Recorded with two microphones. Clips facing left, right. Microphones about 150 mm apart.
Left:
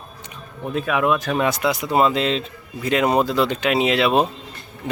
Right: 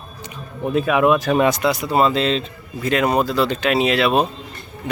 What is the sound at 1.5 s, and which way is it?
A man's voice, 15° left (ahead or behind).